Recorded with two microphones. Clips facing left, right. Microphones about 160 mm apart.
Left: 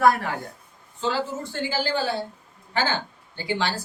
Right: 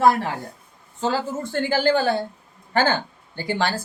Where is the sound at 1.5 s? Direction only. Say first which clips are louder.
Right 7 dB; 55° right (ahead or behind).